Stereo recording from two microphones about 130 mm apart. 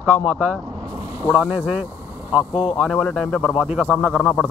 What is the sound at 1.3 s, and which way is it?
Speech, 10° right (ahead or behind).